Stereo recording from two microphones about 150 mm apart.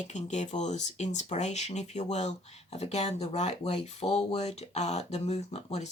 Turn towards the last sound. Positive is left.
turn(degrees=45)  # may be behind; listen again after turning